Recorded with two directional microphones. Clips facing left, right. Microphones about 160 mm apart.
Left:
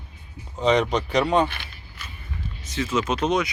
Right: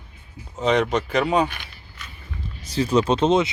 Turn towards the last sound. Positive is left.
turn(degrees=-25)  # may be behind; listen again after turning